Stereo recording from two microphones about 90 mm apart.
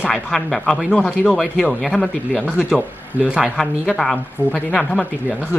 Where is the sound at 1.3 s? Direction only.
5° left (ahead or behind).